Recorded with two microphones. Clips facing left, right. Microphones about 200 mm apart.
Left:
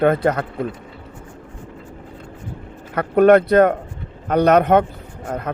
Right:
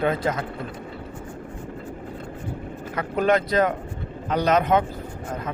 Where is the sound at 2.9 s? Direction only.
60° left (ahead or behind).